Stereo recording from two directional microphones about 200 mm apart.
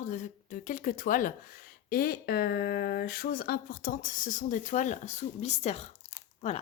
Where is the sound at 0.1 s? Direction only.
40° left (ahead or behind).